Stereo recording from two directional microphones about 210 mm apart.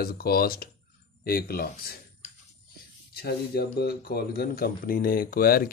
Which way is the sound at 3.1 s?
45° left (ahead or behind).